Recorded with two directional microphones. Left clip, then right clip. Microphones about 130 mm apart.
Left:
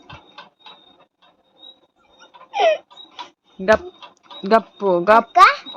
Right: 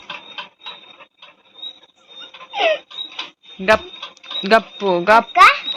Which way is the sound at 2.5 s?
30° left (ahead or behind).